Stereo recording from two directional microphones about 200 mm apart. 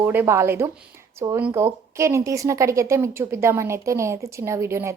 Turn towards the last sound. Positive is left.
turn(degrees=-15)  # may be behind; listen again after turning